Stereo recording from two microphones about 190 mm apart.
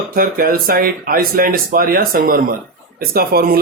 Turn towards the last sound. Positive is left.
turn(degrees=-55)  # may be behind; listen again after turning